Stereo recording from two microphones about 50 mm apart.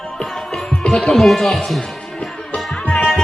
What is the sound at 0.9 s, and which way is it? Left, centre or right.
Speech, centre.